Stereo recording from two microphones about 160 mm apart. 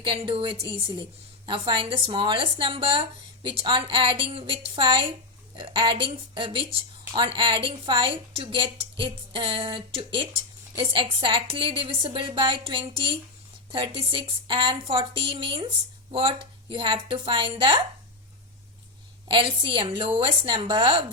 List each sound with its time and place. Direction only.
0.0 s a woman's voice: 35° right (ahead or behind)
19.3 s a woman's voice: 30° right (ahead or behind)